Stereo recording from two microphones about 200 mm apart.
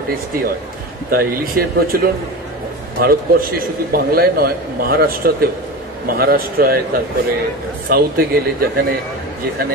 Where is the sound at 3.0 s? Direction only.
45° right (ahead or behind).